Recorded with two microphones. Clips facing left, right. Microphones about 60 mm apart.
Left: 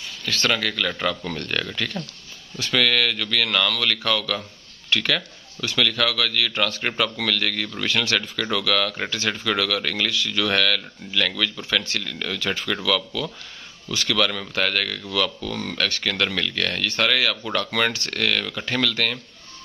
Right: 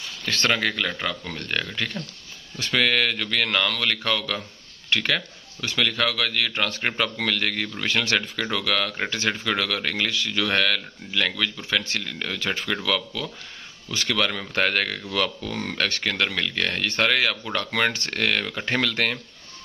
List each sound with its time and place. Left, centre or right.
0.2 s speech: right
1.3 s speech: centre
14.6 s speech: right